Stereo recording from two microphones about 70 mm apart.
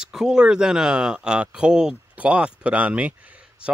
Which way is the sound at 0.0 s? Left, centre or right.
Centre.